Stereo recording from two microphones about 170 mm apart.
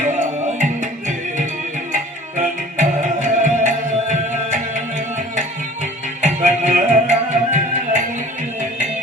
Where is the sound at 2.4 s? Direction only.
45° right (ahead or behind).